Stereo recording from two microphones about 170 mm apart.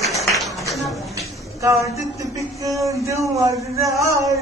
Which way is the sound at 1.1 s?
20° right (ahead or behind).